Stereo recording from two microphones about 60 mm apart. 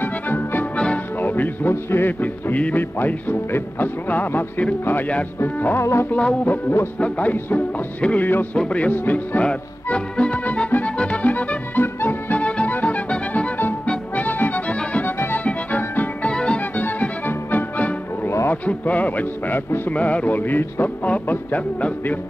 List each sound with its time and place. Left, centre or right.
0.0 s music: left
0.7 s music: centre
1.2 s a man's voice: left
6.0 s a man's voice: left
8.9 s a man's voice: left
9.4 s music: centre; by 12.4 s left
12.4 s music: left
15.1 s music: left
16.3 s music: centre
18.5 s speech: left
19.9 s a man's voice: left